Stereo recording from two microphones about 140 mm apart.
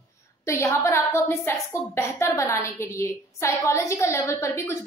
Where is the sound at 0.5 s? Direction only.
20° left (ahead or behind).